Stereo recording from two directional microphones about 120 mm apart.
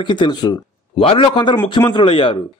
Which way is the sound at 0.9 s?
50° left (ahead or behind).